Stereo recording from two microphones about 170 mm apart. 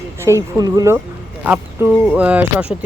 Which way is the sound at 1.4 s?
10° right (ahead or behind).